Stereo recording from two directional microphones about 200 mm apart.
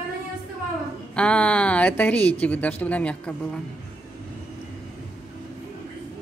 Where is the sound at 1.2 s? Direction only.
5° left (ahead or behind).